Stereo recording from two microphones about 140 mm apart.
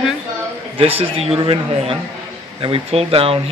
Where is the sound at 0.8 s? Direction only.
45° right (ahead or behind).